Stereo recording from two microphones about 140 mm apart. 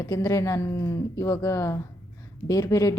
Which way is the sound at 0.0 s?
20° left (ahead or behind).